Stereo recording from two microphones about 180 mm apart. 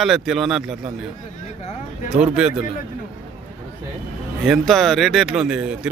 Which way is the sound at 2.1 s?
5° right (ahead or behind).